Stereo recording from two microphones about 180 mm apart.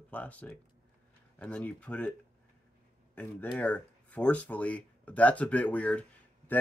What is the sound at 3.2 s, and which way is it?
Speech, 10° left (ahead or behind).